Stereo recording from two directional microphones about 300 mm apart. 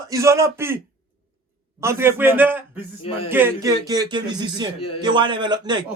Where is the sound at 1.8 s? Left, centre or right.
Centre.